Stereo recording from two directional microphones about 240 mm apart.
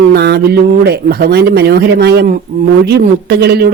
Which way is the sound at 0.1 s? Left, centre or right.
Right.